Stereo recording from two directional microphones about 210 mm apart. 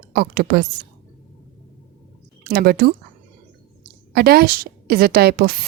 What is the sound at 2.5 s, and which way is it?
A woman's voice, 45° right (ahead or behind).